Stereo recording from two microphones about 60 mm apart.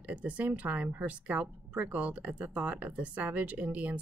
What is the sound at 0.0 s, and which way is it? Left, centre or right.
Speech, right.